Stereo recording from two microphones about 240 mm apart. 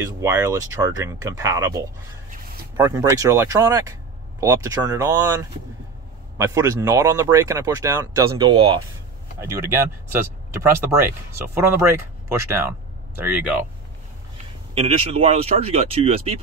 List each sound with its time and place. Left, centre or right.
0.0 s speech: centre
2.8 s speech: centre
6.3 s speech: centre
14.7 s speech: right